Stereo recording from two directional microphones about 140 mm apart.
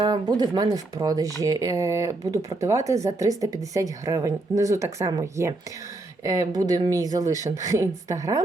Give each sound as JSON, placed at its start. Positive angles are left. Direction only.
{"t": 0.0, "sound": "speech", "side_deg": -30}